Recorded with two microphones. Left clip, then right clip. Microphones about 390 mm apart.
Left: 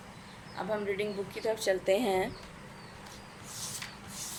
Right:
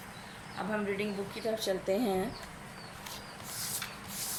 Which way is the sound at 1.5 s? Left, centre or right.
Centre.